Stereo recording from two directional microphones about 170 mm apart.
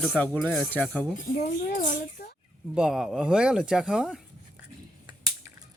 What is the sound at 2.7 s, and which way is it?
Speech, 5° right (ahead or behind).